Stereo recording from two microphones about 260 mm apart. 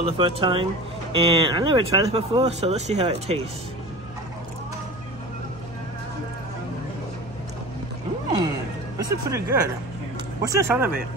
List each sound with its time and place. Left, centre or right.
0.0 s speech: right
8.9 s speech: centre